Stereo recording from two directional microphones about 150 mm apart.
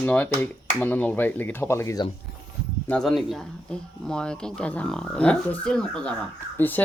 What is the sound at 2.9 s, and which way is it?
Speech, 5° left (ahead or behind).